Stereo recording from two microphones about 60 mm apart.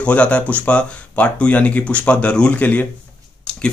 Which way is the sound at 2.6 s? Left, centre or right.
Left.